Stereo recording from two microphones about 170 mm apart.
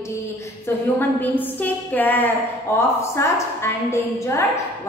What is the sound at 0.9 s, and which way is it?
A woman's voice, 10° left (ahead or behind).